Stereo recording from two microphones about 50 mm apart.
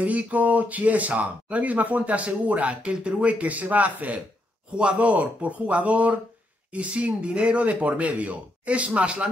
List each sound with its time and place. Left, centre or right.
0.0 s speech: right